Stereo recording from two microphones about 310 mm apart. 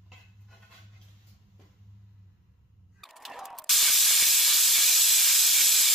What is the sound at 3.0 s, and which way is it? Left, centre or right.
Hiss, centre.